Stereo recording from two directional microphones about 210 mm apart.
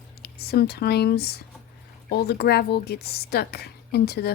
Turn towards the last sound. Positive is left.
turn(degrees=50)  # may be behind; listen again after turning